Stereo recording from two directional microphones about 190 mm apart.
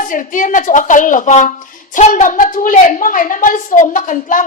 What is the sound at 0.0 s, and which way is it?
A woman's voice, 45° left (ahead or behind).